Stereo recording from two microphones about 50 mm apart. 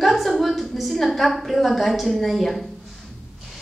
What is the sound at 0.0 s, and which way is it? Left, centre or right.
A woman's voice, centre.